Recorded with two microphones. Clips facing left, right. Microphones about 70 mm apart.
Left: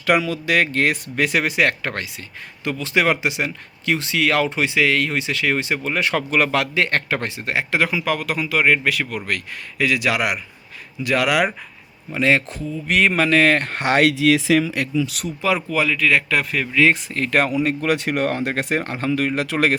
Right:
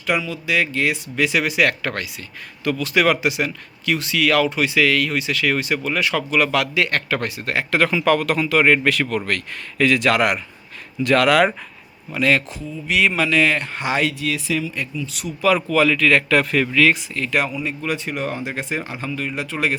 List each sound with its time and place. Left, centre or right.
0.0 s a man's voice: left; by 11.5 s centre
12.1 s speech: left
12.5 s speech: left
15.4 s a man's voice: centre
16.9 s speech: left
17.5 s speech: left